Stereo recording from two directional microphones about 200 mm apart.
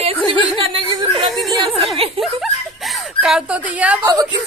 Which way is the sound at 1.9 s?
30° right (ahead or behind).